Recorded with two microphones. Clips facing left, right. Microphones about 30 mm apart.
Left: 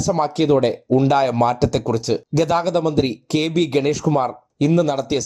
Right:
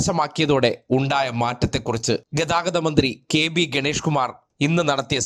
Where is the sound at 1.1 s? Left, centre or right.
Right.